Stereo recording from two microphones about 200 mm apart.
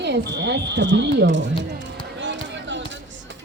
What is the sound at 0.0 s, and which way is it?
Fire alarm, 60° right (ahead or behind).